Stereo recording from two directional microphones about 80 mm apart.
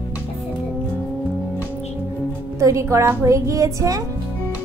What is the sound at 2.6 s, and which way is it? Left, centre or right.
A woman's voice, right.